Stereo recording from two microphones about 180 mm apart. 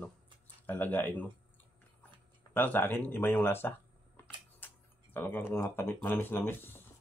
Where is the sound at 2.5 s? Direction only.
10° left (ahead or behind).